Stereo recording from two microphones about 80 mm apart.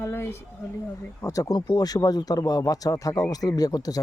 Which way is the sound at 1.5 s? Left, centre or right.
Left.